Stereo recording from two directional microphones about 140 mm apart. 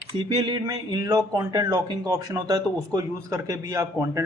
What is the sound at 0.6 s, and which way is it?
Speech, 25° right (ahead or behind).